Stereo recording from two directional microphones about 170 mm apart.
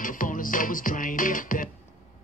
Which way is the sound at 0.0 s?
55° left (ahead or behind).